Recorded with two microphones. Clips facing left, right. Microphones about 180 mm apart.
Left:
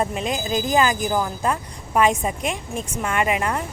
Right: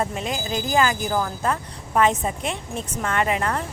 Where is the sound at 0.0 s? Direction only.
20° left (ahead or behind).